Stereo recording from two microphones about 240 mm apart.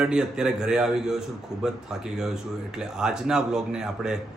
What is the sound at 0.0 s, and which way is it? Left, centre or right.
A man's voice, centre.